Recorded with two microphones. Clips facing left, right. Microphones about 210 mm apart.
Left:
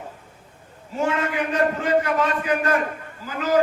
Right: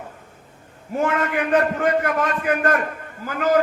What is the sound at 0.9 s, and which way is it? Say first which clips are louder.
A man's voice: right 2 dB; 55° right (ahead or behind).